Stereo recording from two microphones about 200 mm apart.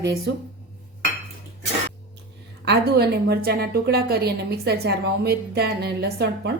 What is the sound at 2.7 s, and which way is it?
A woman's voice, 55° right (ahead or behind).